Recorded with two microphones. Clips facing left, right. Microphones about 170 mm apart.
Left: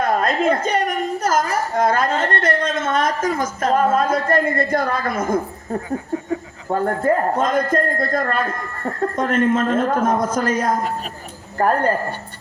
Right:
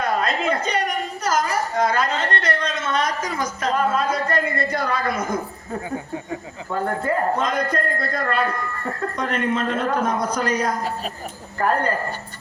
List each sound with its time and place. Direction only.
0.0 s a woman's voice: 50° left (ahead or behind)
6.7 s a woman's voice: 45° left (ahead or behind)